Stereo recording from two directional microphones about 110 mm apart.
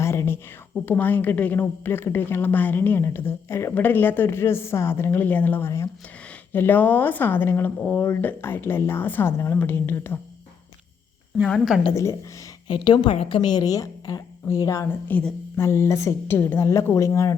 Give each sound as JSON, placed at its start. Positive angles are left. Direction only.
{"t": 0.0, "sound": "a sound", "side_deg": 25}
{"t": 0.9, "sound": "a woman's voice", "side_deg": 15}
{"t": 12.6, "sound": "a woman's voice", "side_deg": 45}
{"t": 15.0, "sound": "a woman's voice", "side_deg": 15}